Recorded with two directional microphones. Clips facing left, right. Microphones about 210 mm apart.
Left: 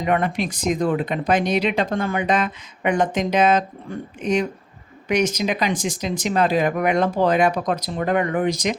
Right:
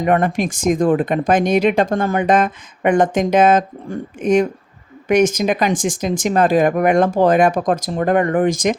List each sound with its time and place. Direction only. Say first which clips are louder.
0.0 s speech: right 5 dB; 45° right (ahead or behind)